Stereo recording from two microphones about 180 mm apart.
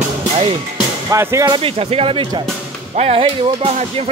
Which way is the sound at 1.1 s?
15° right (ahead or behind).